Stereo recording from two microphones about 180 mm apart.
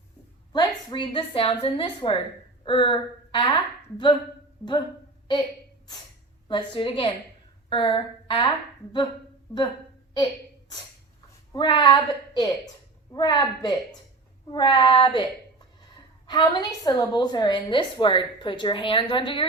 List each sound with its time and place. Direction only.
0.5 s a woman's voice: 25° left (ahead or behind)
4.6 s speech: 15° left (ahead or behind)
6.5 s a woman's voice: 30° left (ahead or behind)
11.5 s a woman's voice: 25° left (ahead or behind)